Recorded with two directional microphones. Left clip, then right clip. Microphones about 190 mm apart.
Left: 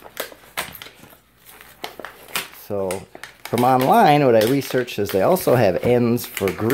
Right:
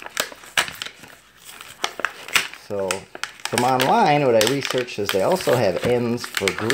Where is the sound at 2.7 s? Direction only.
15° left (ahead or behind).